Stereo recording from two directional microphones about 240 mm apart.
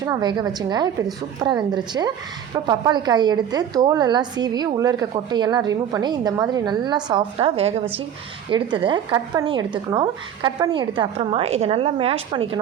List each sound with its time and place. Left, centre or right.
0.0 s a woman's voice: centre